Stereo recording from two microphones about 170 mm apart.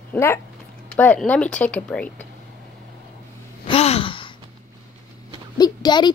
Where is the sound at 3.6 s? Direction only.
35° left (ahead or behind).